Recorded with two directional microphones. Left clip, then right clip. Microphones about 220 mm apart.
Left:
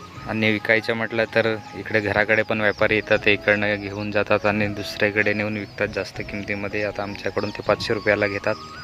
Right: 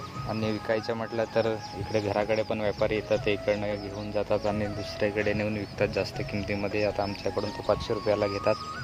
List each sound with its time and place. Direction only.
0.3 s speech: 20° left (ahead or behind); by 6.9 s centre (ahead or behind)
6.9 s speech: 10° left (ahead or behind)